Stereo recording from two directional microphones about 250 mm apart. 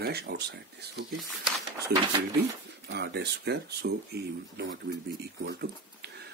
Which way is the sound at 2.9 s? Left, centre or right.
Right.